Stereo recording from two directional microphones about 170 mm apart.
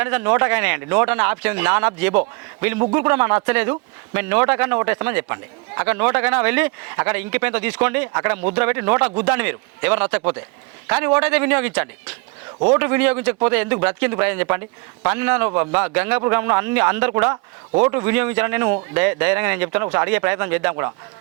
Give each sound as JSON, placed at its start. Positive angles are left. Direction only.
{"t": 0.0, "sound": "speech", "side_deg": -10}